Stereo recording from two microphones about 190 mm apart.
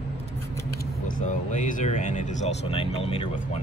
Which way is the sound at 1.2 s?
40° left (ahead or behind).